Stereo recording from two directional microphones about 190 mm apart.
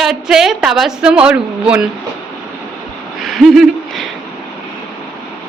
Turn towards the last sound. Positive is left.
turn(degrees=0)  # may be behind; listen again after turning